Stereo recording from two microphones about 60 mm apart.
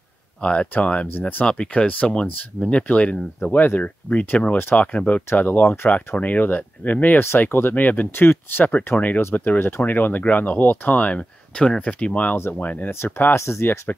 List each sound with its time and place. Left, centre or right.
0.4 s speech: centre
13.0 s speech: left